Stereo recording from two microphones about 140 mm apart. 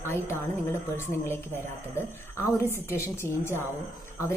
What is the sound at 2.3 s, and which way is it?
Speech, 20° left (ahead or behind).